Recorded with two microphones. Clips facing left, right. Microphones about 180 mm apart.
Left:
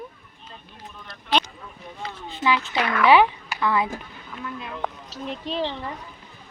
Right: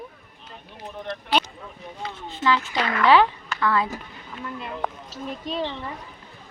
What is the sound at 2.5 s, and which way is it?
Speech, 10° left (ahead or behind).